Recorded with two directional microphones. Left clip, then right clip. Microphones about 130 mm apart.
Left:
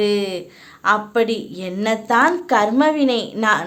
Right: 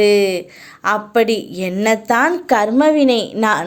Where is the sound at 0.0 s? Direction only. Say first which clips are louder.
Right 7 dB; 25° right (ahead or behind).